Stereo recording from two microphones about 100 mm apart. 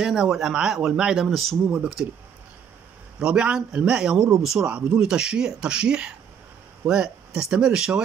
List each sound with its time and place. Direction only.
0.0 s speech: 10° right (ahead or behind)
3.2 s speech: 10° right (ahead or behind)